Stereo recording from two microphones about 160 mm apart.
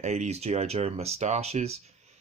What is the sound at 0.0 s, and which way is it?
Speech, 45° right (ahead or behind).